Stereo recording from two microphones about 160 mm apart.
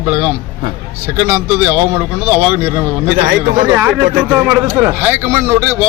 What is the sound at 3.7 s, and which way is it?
A man's voice, 15° right (ahead or behind).